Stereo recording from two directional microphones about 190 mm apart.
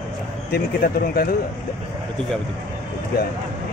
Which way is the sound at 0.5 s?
55° left (ahead or behind).